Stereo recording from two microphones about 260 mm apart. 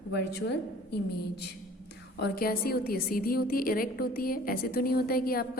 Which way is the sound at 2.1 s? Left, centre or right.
Left.